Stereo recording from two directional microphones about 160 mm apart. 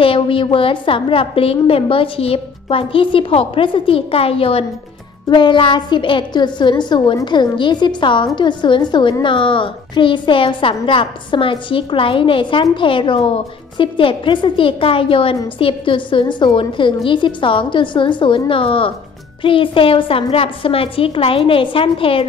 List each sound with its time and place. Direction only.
0.0 s a woman's voice: 35° left (ahead or behind)